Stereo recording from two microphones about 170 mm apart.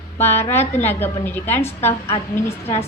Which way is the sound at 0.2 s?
15° left (ahead or behind).